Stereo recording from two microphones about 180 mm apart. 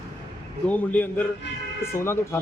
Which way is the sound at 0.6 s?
10° left (ahead or behind).